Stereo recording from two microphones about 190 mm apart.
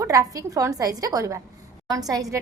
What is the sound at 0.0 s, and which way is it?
A woman's voice, 15° right (ahead or behind).